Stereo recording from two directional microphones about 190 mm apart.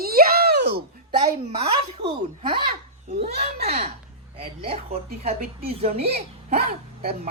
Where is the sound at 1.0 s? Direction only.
30° right (ahead or behind).